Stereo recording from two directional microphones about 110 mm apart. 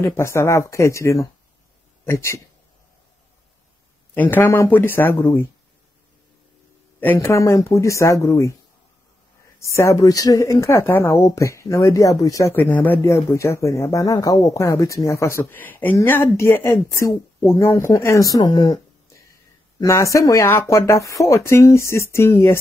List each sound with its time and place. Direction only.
0.0 s speech: 25° left (ahead or behind)
4.1 s speech: 15° left (ahead or behind)
7.0 s speech: 15° left (ahead or behind)
7.2 s speech: 30° left (ahead or behind)
9.6 s speech: 25° left (ahead or behind)
12.5 s speech: 15° left (ahead or behind)
13.0 s speech: 25° left (ahead or behind)
19.8 s speech: 30° left (ahead or behind)